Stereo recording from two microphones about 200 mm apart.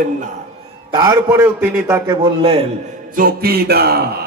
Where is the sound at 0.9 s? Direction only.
15° right (ahead or behind).